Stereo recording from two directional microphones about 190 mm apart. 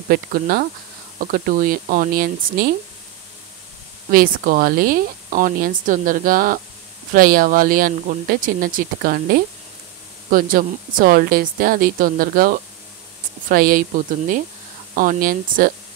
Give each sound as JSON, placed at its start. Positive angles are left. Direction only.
{"t": 0.1, "sound": "speech", "side_deg": -50}
{"t": 4.1, "sound": "speech", "side_deg": -50}